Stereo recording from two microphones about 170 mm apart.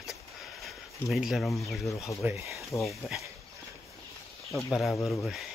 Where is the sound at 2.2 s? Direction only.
15° right (ahead or behind).